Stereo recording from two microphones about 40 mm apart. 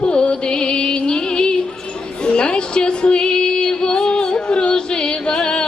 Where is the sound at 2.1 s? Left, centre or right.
Left.